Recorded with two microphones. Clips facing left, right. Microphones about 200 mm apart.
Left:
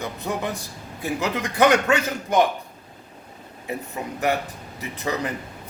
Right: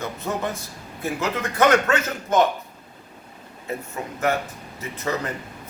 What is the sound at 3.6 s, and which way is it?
A man's voice, 15° left (ahead or behind).